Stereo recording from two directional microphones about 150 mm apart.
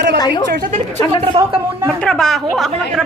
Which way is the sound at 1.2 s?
35° right (ahead or behind).